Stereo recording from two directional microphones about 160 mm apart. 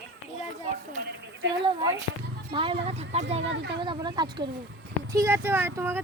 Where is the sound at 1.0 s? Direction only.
90° right.